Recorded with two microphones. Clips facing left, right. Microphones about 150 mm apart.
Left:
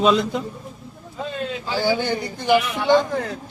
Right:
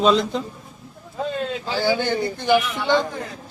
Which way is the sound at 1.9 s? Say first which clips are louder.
Right 1 dB; 15° left (ahead or behind).